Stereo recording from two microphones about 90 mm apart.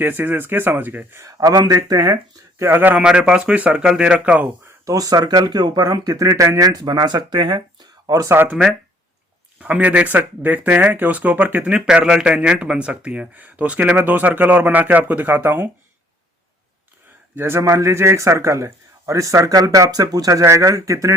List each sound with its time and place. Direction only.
0.0 s speech: 20° right (ahead or behind)
1.3 s speech: 40° right (ahead or behind)
2.6 s speech: 20° right (ahead or behind)
4.9 s speech: 40° right (ahead or behind)
8.0 s speech: 40° right (ahead or behind)
8.3 s speech: 25° right (ahead or behind)
9.6 s speech: 15° right (ahead or behind)
17.3 s speech: 25° right (ahead or behind)